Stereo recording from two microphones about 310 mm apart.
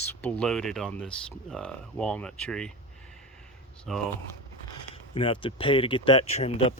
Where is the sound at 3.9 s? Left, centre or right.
Centre.